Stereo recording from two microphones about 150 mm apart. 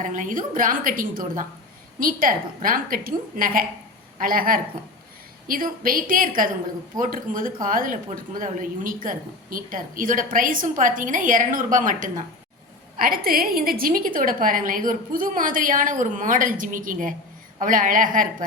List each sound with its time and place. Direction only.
0.0 s a woman's voice: 60° right (ahead or behind)
13.0 s speech: 75° right (ahead or behind)